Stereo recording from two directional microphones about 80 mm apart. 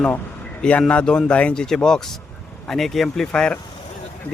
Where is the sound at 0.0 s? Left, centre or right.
Centre.